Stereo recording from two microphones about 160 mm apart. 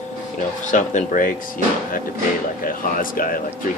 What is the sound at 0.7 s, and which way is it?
Speech, 50° left (ahead or behind).